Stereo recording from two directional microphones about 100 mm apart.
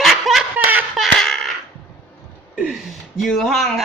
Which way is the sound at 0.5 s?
15° right (ahead or behind).